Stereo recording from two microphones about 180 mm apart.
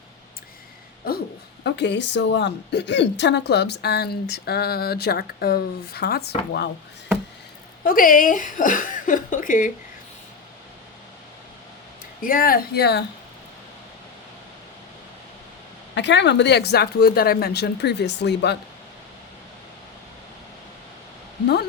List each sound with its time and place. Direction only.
1.6 s a woman's voice: 70° left (ahead or behind)
7.9 s speech: 50° left (ahead or behind)
12.2 s a woman's voice: 50° left (ahead or behind)
16.0 s speech: 80° left
21.4 s a sound: 65° left (ahead or behind)